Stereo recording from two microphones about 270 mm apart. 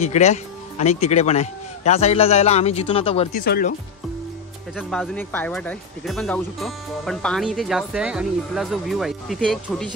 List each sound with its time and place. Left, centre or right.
0.0 s speech: left
3.3 s speech: left
4.7 s speech: centre